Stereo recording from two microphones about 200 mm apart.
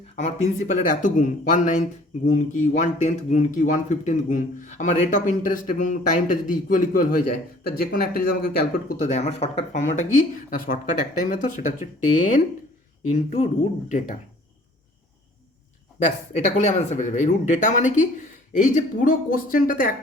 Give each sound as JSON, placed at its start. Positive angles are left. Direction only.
{"t": 0.2, "sound": "speech", "side_deg": 35}
{"t": 13.1, "sound": "speech", "side_deg": 35}
{"t": 16.0, "sound": "speech", "side_deg": 35}